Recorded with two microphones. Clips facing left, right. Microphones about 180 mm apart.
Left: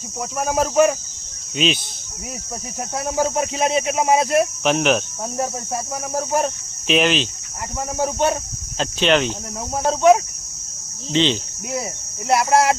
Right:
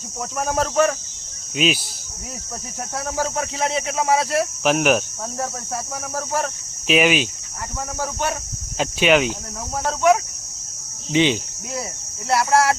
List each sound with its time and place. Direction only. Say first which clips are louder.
0.3 s speech: left 3 dB; 10° left (ahead or behind)
1.5 s speech: even; 5° right (ahead or behind)
3.2 s speech: left 4 dB; 20° left (ahead or behind)
4.6 s speech: even; 5° right (ahead or behind)
5.4 s speech: left 3 dB; 20° left (ahead or behind)
6.8 s speech: right 1 dB; 5° right (ahead or behind)
7.9 s speech: left 6 dB; 25° left (ahead or behind)
8.8 s speech: right 1 dB; 10° right (ahead or behind)
9.7 s speech: left 3 dB; 25° left (ahead or behind)
11.1 s speech: right 1 dB; 10° right (ahead or behind)
12.3 s speech: left 1 dB; 20° left (ahead or behind)